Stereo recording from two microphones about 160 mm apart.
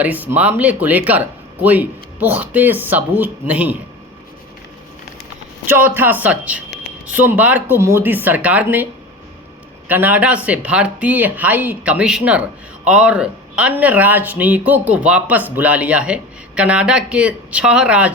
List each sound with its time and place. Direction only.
0.0 s speech: 10° right (ahead or behind)
5.6 s speech: 15° right (ahead or behind)
9.9 s speech: 10° right (ahead or behind)